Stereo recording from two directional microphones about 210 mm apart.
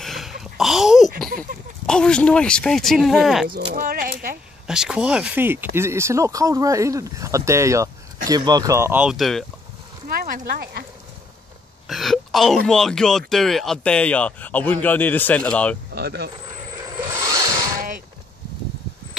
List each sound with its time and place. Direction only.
0.0 s a sound: centre (ahead or behind)
1.9 s speech: 5° left (ahead or behind)
3.4 s speech: 45° right (ahead or behind)
4.6 s speech: 5° right (ahead or behind)
10.0 s speech: 45° right (ahead or behind)
11.9 s a man's voice: centre (ahead or behind)
15.9 s speech: 50° right (ahead or behind)
16.7 s a sound: 15° right (ahead or behind)
17.7 s a sound: 40° right (ahead or behind)